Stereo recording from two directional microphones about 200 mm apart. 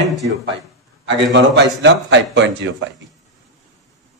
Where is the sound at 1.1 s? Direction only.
60° right (ahead or behind).